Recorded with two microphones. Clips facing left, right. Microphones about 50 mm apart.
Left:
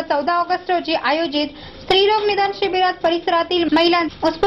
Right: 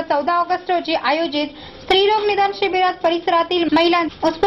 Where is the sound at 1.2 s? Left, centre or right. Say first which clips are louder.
Even; right.